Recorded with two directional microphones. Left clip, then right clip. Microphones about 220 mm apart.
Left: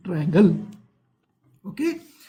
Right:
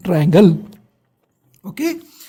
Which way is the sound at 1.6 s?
45° right (ahead or behind).